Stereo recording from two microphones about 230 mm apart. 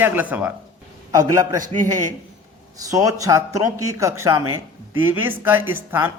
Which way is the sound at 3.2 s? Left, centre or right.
Centre.